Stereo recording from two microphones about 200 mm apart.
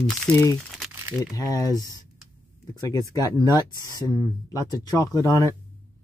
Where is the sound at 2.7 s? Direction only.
15° left (ahead or behind).